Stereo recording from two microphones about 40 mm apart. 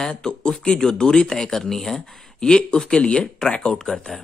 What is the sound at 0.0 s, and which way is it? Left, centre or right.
Speech, centre.